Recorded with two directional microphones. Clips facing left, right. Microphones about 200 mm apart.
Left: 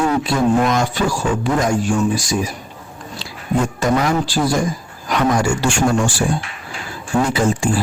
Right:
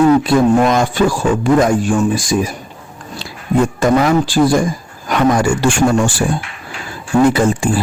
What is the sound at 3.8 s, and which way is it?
Speech, 50° right (ahead or behind).